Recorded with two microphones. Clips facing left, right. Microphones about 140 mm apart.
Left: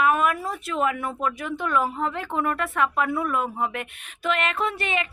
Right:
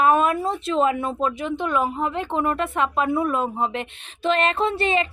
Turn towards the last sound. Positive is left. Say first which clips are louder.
# right 5 dB
turn(degrees=-30)  # may be behind; listen again after turning